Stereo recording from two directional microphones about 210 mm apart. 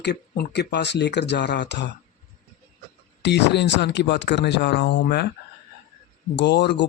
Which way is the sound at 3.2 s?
55° left (ahead or behind).